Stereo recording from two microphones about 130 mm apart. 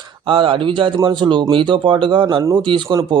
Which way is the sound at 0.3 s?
40° right (ahead or behind).